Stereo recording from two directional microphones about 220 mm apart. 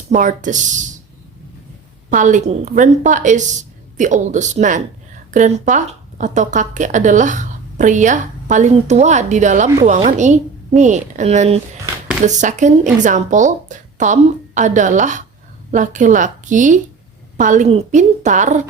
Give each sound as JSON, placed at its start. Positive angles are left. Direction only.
{"t": 0.1, "sound": "speech", "side_deg": -35}
{"t": 2.0, "sound": "speech", "side_deg": -35}